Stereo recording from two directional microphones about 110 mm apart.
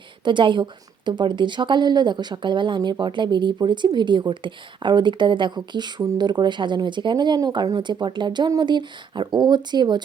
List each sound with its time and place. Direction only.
0.3 s a woman's voice: 45° right (ahead or behind)